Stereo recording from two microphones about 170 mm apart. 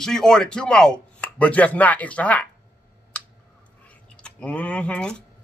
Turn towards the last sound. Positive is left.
turn(degrees=5)  # may be behind; listen again after turning